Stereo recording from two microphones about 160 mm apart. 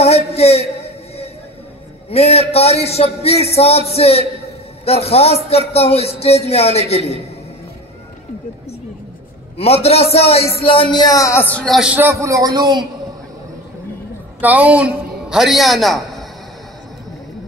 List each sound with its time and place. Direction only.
0.3 s a sound: 40° left (ahead or behind)
2.0 s a man's voice: 40° left (ahead or behind)
9.8 s a man's voice: 40° left (ahead or behind); by 12.8 s 25° right (ahead or behind)
14.4 s a man's voice: 10° right (ahead or behind)